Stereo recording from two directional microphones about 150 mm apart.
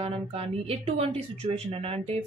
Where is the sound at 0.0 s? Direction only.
40° right (ahead or behind).